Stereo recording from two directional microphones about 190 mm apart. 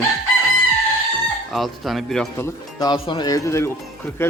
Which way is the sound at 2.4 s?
20° left (ahead or behind).